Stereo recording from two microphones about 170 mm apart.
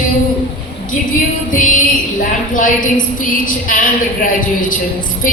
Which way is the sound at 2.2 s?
50° left (ahead or behind).